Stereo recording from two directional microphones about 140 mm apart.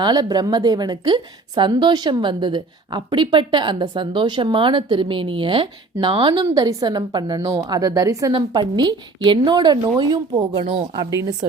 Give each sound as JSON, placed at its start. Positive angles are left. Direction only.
{"t": 0.0, "sound": "a woman's voice", "side_deg": -30}
{"t": 8.3, "sound": "a woman's voice", "side_deg": -35}
{"t": 11.1, "sound": "speech", "side_deg": -25}